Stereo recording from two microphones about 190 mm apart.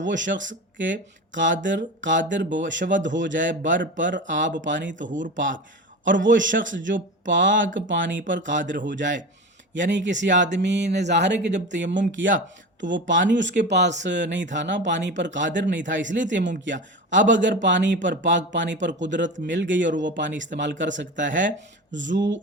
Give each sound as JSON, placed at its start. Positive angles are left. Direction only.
{"t": 0.0, "sound": "speech", "side_deg": -75}
{"t": 5.0, "sound": "speech", "side_deg": -45}
{"t": 6.1, "sound": "speech", "side_deg": -75}